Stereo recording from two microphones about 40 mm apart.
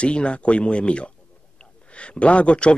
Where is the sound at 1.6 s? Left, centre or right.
Left.